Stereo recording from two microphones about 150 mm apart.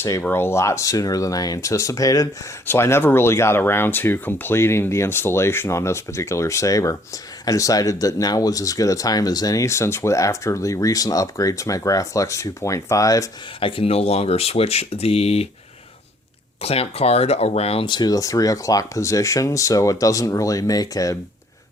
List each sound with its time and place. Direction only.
0.0 s speech: 15° left (ahead or behind)
13.6 s speech: 35° left (ahead or behind)
16.6 s speech: 40° left (ahead or behind); by 21.2 s 25° left (ahead or behind)